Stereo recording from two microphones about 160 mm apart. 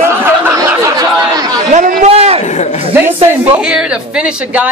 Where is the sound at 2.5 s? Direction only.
45° left (ahead or behind).